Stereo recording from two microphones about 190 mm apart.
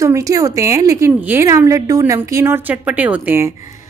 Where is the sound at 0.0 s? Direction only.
15° right (ahead or behind).